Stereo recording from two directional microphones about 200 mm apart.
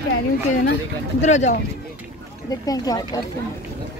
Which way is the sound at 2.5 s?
20° left (ahead or behind).